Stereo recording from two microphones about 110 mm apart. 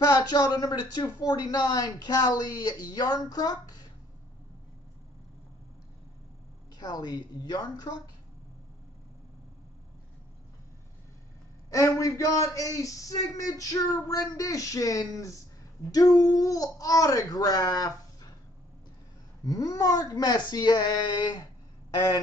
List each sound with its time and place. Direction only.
0.0 s speech: 35° left (ahead or behind)
6.8 s speech: 40° left (ahead or behind)
11.7 s speech: 30° left (ahead or behind)
19.4 s speech: 30° left (ahead or behind)
21.9 s a sound: 30° left (ahead or behind)